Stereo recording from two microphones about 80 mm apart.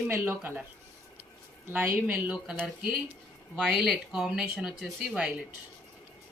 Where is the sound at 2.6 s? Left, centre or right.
Right.